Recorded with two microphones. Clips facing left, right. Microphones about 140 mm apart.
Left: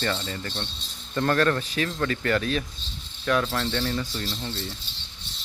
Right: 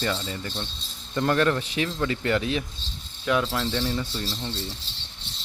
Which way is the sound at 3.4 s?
5° right (ahead or behind).